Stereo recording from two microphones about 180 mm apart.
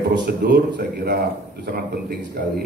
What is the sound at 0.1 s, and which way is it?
A man's voice, 65° right (ahead or behind).